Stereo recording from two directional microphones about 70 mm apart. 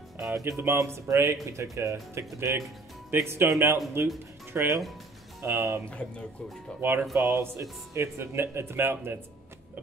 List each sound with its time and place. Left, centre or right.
0.2 s speech: right
5.4 s speech: right
5.9 s speech: centre
6.8 s speech: right